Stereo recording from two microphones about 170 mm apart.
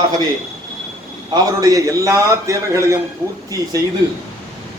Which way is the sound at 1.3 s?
20° right (ahead or behind).